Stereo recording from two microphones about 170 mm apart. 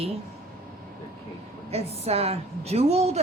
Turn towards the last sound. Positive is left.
turn(degrees=-40)  # may be behind; listen again after turning